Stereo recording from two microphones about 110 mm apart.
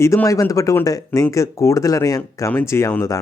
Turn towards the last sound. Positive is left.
turn(degrees=25)  # may be behind; listen again after turning